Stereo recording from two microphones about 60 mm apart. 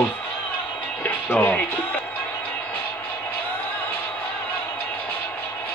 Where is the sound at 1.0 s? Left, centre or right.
Left.